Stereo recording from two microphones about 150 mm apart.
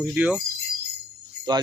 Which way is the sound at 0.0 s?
10° right (ahead or behind).